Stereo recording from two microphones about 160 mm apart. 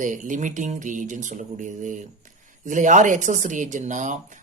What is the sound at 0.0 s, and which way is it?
Speech, 55° right (ahead or behind).